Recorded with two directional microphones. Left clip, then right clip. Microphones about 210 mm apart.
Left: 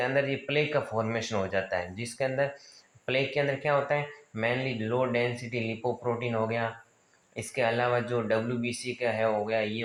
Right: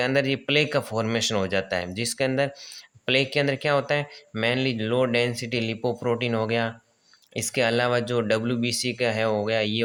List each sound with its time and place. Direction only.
0.0 s speech: 55° right (ahead or behind)